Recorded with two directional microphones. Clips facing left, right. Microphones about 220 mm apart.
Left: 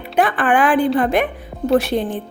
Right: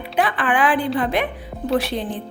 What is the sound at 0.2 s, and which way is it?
A woman's voice, 45° left (ahead or behind).